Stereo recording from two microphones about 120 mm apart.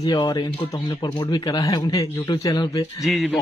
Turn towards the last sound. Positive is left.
turn(degrees=0)  # may be behind; listen again after turning